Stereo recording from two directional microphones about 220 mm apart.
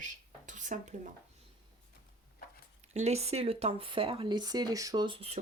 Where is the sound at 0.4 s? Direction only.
35° right (ahead or behind).